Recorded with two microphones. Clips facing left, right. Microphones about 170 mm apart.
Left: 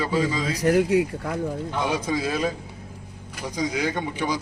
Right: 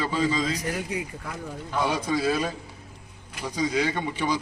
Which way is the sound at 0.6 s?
75° left (ahead or behind).